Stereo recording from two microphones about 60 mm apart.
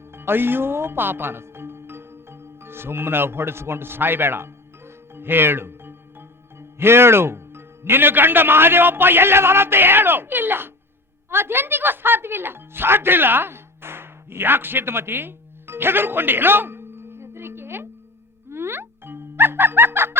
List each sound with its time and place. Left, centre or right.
0.1 s speech: right
18.4 s music: right